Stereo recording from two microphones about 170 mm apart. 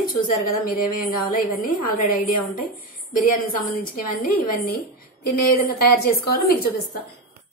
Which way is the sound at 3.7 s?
60° left (ahead or behind).